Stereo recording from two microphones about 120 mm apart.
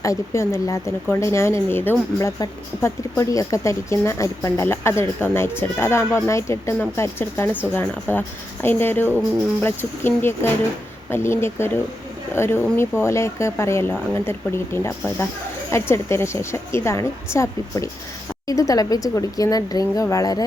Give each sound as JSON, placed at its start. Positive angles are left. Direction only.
{"t": 0.0, "sound": "speech", "side_deg": 25}